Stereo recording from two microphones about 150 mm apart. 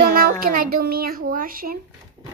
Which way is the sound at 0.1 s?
75° right (ahead or behind).